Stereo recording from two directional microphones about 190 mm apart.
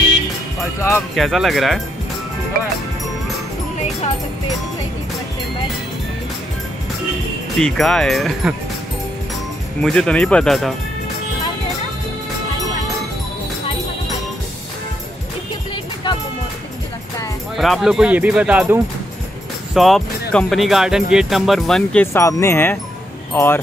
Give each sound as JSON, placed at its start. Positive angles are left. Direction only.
{"t": 1.1, "sound": "speech", "side_deg": 0}
{"t": 7.5, "sound": "speech", "side_deg": 0}
{"t": 9.8, "sound": "speech", "side_deg": 5}
{"t": 15.7, "sound": "music", "side_deg": 25}
{"t": 17.6, "sound": "speech", "side_deg": 0}
{"t": 22.0, "sound": "speech", "side_deg": 15}